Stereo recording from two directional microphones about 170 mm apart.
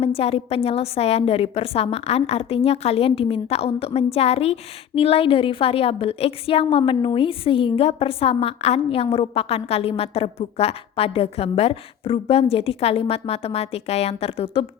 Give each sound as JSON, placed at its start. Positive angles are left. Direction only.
{"t": 0.0, "sound": "a woman's voice", "side_deg": 35}